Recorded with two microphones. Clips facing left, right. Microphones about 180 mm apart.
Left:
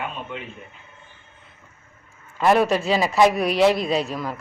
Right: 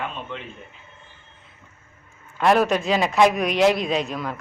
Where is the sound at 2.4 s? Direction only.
Centre (ahead or behind).